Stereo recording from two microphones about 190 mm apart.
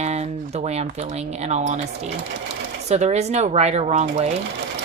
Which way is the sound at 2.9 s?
35° right (ahead or behind).